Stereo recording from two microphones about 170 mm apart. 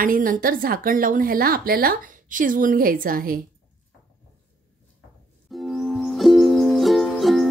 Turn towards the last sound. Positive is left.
turn(degrees=0)  # may be behind; listen again after turning